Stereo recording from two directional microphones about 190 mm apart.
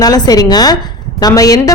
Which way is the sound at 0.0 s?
20° left (ahead or behind).